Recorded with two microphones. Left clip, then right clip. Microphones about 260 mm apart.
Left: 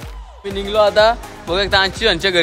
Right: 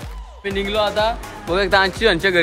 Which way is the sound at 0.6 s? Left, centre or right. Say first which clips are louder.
Left 5 dB; centre.